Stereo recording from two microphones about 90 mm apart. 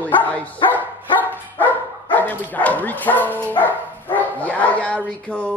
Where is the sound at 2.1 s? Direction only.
20° left (ahead or behind).